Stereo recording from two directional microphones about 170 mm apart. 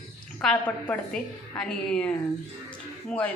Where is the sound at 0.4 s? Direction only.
5° left (ahead or behind).